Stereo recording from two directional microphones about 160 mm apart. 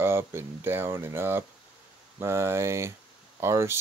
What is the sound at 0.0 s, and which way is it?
Speech, 15° right (ahead or behind).